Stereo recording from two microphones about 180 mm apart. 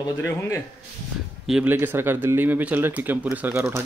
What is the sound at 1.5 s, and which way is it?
Speech, 5° right (ahead or behind).